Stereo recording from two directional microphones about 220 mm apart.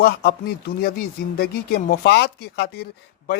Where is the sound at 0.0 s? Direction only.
45° left (ahead or behind).